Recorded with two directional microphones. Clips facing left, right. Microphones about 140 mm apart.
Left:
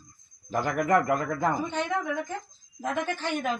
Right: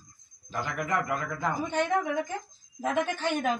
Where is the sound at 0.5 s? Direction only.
45° left (ahead or behind).